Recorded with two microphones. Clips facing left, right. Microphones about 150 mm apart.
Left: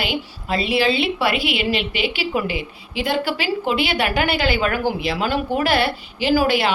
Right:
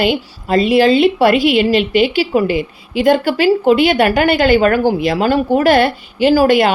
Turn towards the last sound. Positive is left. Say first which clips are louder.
# right 7 dB
turn(degrees=-45)  # may be behind; listen again after turning